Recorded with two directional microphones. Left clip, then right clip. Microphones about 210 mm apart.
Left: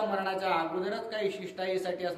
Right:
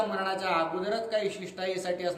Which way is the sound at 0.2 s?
10° right (ahead or behind).